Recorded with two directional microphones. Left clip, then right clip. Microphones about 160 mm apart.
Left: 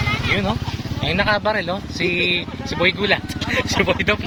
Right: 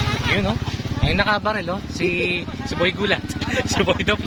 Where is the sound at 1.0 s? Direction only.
Centre (ahead or behind).